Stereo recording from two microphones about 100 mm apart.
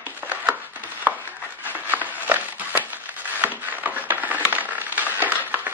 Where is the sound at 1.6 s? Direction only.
15° right (ahead or behind).